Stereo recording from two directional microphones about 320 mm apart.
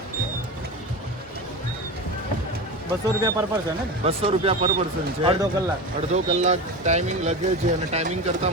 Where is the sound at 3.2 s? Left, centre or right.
Centre.